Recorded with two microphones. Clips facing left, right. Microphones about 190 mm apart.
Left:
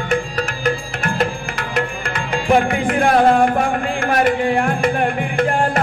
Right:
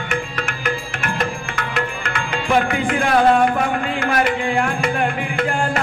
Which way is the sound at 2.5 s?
45° left (ahead or behind).